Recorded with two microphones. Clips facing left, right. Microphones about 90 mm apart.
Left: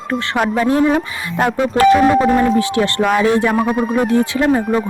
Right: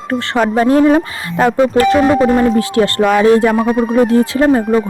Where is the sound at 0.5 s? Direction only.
40° right (ahead or behind).